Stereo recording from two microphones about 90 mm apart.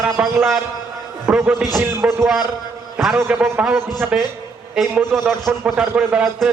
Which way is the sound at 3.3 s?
15° right (ahead or behind).